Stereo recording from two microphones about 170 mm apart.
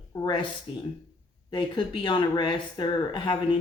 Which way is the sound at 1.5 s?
30° left (ahead or behind).